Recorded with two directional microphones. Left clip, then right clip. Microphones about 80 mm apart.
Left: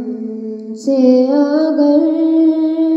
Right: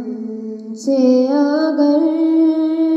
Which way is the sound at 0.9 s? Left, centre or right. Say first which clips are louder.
Left 2 dB; left.